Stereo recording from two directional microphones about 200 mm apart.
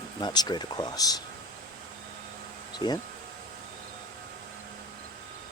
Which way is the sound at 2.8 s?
20° left (ahead or behind).